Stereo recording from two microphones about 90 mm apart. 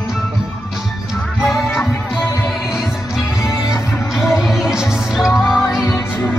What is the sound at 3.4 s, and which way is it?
Music, 5° right (ahead or behind).